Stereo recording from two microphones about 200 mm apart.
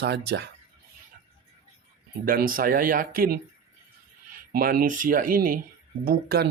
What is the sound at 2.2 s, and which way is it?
Speech, 45° right (ahead or behind).